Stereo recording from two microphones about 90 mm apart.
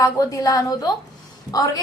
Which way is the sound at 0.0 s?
40° left (ahead or behind).